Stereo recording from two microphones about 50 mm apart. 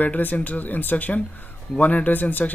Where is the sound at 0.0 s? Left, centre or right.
Left.